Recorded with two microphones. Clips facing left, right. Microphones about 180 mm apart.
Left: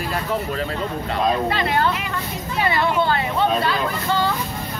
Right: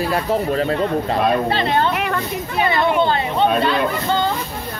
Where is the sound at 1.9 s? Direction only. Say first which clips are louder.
Right 6 dB; 60° right (ahead or behind).